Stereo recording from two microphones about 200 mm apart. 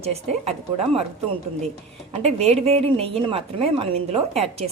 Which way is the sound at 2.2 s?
30° right (ahead or behind).